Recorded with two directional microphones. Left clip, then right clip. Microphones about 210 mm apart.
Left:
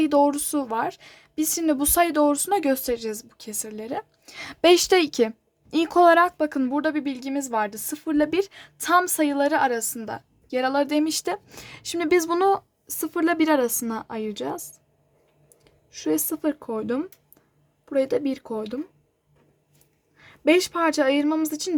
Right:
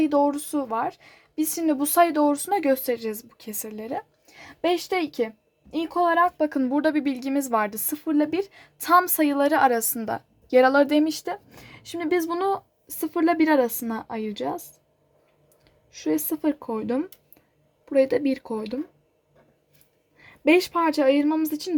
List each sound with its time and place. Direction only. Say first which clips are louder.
0.0 s a woman's voice: left 2 dB; 15° left (ahead or behind)
4.3 s a woman's voice: left 7 dB; 20° left (ahead or behind)
6.1 s a woman's voice: left 1 dB; 5° left (ahead or behind)
7.9 s a woman's voice: left 2 dB; 5° left (ahead or behind); by 11.0 s 10° right (ahead or behind)
11.0 s a woman's voice: left 1 dB; 10° left (ahead or behind)
20.2 s a woman's voice: even; 5° right (ahead or behind)